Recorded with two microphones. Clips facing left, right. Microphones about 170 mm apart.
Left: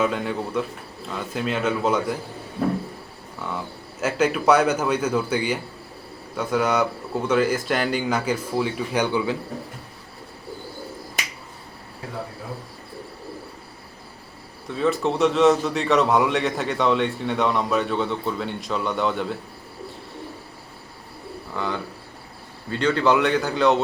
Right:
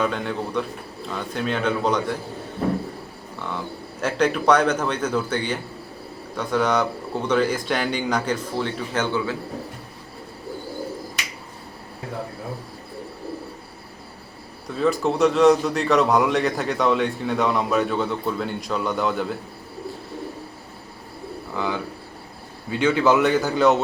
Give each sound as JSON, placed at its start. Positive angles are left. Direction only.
{"t": 0.0, "sound": "a man's voice", "side_deg": 5}
{"t": 4.0, "sound": "speech", "side_deg": 5}
{"t": 14.7, "sound": "a man's voice", "side_deg": 0}
{"t": 21.5, "sound": "a man's voice", "side_deg": -5}